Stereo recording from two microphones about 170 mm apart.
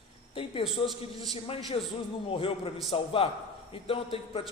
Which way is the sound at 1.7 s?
30° left (ahead or behind).